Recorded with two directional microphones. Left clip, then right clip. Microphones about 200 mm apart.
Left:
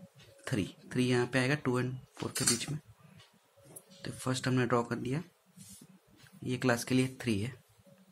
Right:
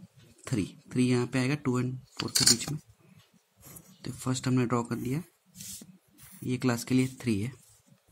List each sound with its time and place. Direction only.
0.4 s speech: 25° right (ahead or behind)
4.0 s speech: 25° right (ahead or behind)
6.4 s speech: 25° right (ahead or behind)